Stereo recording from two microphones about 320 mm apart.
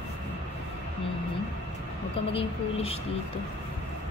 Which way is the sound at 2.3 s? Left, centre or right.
Centre.